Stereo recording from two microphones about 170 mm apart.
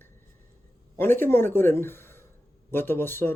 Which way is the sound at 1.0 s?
10° left (ahead or behind).